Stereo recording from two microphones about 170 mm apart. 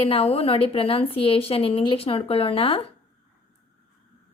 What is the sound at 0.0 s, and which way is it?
A woman's voice, 35° left (ahead or behind).